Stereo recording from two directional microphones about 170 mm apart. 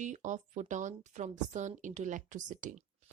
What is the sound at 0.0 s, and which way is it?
A woman's voice, 45° right (ahead or behind).